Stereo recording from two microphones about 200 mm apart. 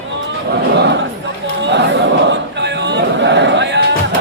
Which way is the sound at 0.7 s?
60° right (ahead or behind).